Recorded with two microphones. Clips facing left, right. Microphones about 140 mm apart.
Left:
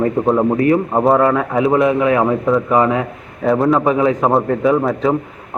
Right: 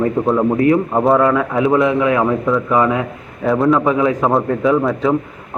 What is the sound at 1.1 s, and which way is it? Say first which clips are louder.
A man's voice: even; 25° left (ahead or behind).